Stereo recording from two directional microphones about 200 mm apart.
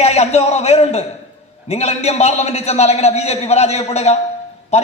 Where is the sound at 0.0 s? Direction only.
30° left (ahead or behind).